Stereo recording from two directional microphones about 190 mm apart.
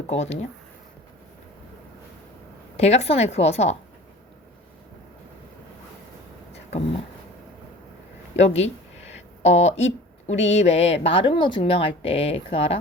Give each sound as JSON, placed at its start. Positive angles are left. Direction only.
{"t": 0.1, "sound": "speech", "side_deg": 35}
{"t": 2.7, "sound": "speech", "side_deg": 35}
{"t": 8.4, "sound": "speech", "side_deg": 35}